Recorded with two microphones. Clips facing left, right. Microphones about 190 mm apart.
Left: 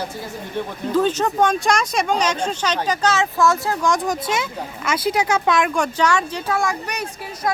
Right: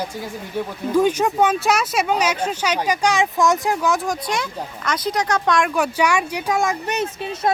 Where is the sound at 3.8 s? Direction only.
5° right (ahead or behind).